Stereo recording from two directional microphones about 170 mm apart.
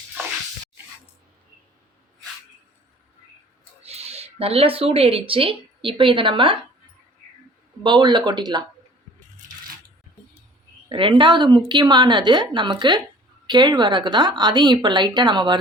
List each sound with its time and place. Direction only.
3.8 s speech: 35° right (ahead or behind)
7.9 s speech: 25° right (ahead or behind)
10.8 s speech: 30° right (ahead or behind)